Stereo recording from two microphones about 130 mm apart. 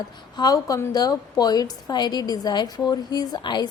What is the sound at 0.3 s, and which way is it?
A woman's voice, 30° left (ahead or behind).